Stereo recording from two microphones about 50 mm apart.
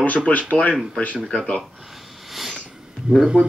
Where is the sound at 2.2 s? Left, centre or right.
Centre.